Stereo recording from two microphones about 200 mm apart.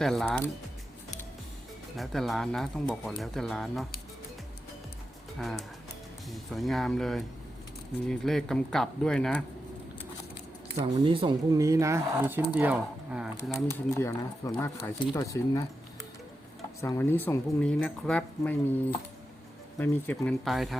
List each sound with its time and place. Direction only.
0.0 s speech: centre (ahead or behind)
2.0 s speech: centre (ahead or behind)
5.4 s speech: centre (ahead or behind)
10.9 s speech: 25° right (ahead or behind); by 13.6 s 5° right (ahead or behind)
13.9 s speech: 15° left (ahead or behind)
16.8 s speech: 10° left (ahead or behind)